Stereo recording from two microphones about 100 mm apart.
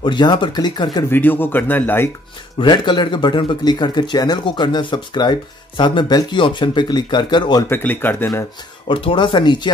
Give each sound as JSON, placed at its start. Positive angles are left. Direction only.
{"t": 0.0, "sound": "speech", "side_deg": 50}
{"t": 1.1, "sound": "speech", "side_deg": 20}
{"t": 2.6, "sound": "speech", "side_deg": 50}
{"t": 7.7, "sound": "speech", "side_deg": 20}
{"t": 8.8, "sound": "speech", "side_deg": 60}